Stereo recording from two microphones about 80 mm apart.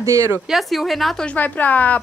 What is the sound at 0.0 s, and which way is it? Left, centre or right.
Speech, right.